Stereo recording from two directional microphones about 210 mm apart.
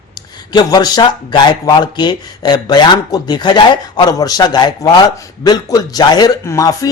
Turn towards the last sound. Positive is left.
turn(degrees=15)  # may be behind; listen again after turning